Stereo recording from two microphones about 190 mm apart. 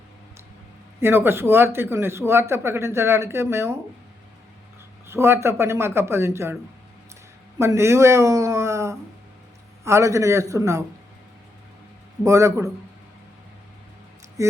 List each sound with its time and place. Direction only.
1.0 s a man's voice: 10° right (ahead or behind)
5.0 s a man's voice: 15° right (ahead or behind)
7.6 s a man's voice: 15° right (ahead or behind)
12.2 s a man's voice: 15° right (ahead or behind)
14.4 s a sound: 15° right (ahead or behind)